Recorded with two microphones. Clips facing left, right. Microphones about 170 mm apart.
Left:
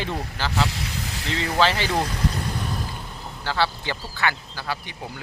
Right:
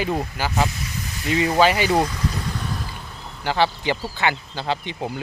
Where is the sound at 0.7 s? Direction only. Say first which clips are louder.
Even; 75° left (ahead or behind).